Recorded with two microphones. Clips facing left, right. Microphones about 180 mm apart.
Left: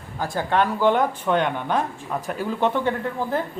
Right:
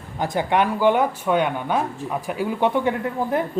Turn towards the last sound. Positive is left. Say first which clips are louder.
# right 2 dB
turn(degrees=-10)  # may be behind; listen again after turning